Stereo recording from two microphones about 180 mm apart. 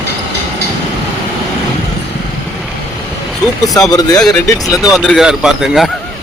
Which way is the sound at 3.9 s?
20° left (ahead or behind).